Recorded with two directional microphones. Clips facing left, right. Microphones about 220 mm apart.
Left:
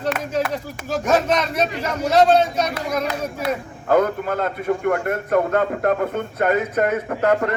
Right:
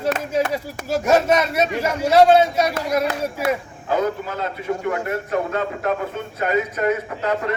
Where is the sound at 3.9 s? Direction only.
55° left (ahead or behind).